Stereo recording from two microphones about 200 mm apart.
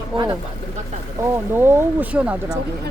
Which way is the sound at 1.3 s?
10° right (ahead or behind).